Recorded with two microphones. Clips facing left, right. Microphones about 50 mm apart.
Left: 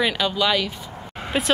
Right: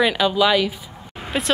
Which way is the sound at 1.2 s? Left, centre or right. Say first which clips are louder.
Even; centre.